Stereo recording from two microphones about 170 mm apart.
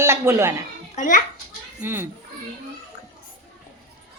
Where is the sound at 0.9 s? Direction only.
50° left (ahead or behind).